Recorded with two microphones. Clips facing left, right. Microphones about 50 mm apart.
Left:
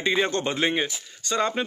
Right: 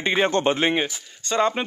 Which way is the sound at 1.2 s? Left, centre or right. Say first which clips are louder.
Right 3 dB; right.